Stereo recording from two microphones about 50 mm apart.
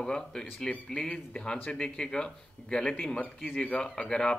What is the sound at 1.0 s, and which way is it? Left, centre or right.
Speech, left.